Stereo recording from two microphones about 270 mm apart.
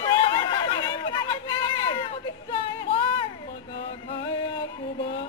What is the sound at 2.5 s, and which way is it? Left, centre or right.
Female singing, centre.